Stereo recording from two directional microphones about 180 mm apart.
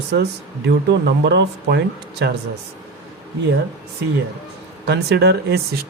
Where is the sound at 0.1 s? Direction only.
70° right (ahead or behind).